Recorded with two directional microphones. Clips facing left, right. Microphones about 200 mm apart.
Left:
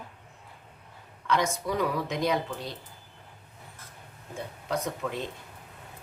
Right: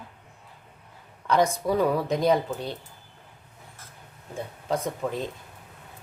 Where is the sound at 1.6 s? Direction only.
30° right (ahead or behind).